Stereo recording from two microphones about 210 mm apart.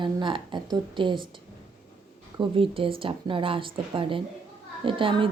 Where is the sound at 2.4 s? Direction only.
25° right (ahead or behind).